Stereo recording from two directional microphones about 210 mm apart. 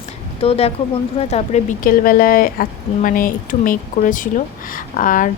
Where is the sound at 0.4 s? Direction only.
30° left (ahead or behind).